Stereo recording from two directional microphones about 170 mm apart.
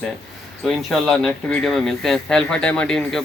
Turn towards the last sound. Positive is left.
turn(degrees=0)  # may be behind; listen again after turning